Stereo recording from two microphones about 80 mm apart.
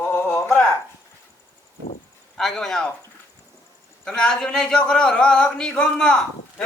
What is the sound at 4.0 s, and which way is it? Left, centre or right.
A man's voice, centre.